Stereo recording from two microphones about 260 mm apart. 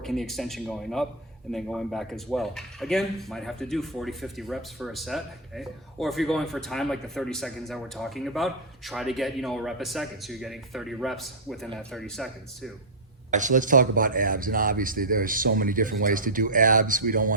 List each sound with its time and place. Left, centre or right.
0.0 s speech: centre
13.3 s speech: right